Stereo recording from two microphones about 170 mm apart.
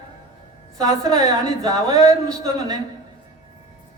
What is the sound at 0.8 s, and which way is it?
Speech, 25° right (ahead or behind).